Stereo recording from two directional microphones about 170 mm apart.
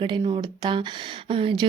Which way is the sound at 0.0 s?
30° right (ahead or behind).